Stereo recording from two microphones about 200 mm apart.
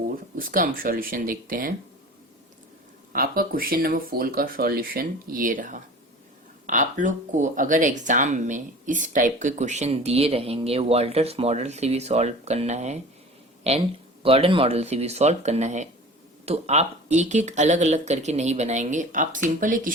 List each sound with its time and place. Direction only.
0.3 s speech: 45° right (ahead or behind)
3.1 s speech: 45° right (ahead or behind)